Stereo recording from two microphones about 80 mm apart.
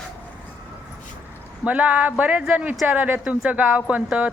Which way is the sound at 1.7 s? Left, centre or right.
Centre.